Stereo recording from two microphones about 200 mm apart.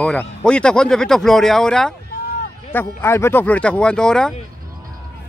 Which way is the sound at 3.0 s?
10° left (ahead or behind).